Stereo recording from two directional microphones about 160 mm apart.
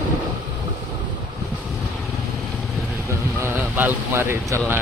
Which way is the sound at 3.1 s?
15° right (ahead or behind).